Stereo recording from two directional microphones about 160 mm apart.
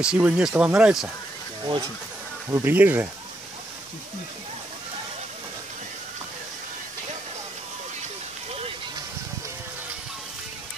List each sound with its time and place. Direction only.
0.0 s speech: 5° right (ahead or behind)
1.6 s speech: 30° right (ahead or behind)
2.5 s speech: 10° right (ahead or behind)